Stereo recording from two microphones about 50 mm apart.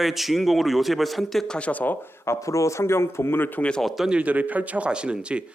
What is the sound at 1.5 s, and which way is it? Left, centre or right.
Speech, left.